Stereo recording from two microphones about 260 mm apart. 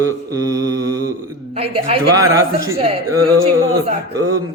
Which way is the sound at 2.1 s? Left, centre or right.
Centre.